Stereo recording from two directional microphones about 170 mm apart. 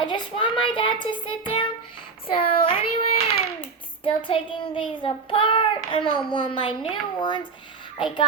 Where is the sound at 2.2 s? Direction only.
30° left (ahead or behind).